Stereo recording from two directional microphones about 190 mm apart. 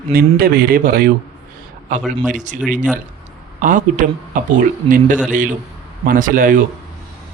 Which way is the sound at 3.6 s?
45° right (ahead or behind).